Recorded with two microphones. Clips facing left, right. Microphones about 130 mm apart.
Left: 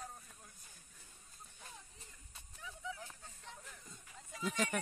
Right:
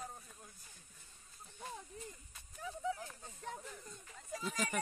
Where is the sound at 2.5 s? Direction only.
40° right (ahead or behind).